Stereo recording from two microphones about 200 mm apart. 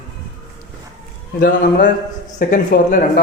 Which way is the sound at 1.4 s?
55° left (ahead or behind).